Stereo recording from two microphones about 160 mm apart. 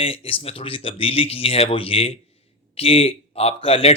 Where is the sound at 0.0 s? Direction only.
35° left (ahead or behind).